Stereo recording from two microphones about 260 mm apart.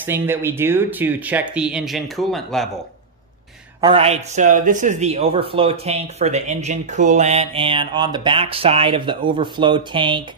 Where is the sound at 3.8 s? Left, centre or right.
Right.